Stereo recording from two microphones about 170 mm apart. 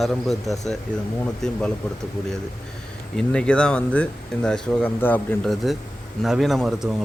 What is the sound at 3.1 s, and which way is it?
Speech, 5° left (ahead or behind).